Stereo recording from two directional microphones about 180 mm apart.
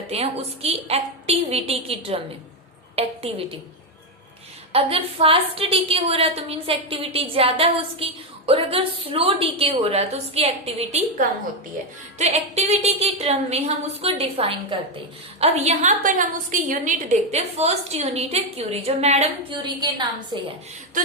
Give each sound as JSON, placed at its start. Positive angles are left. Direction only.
{"t": 0.1, "sound": "a woman's voice", "side_deg": -35}
{"t": 4.7, "sound": "a woman's voice", "side_deg": -30}
{"t": 12.1, "sound": "a woman's voice", "side_deg": -40}
{"t": 19.6, "sound": "a woman's voice", "side_deg": -25}